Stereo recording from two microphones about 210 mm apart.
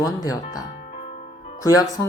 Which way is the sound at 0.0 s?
15° left (ahead or behind).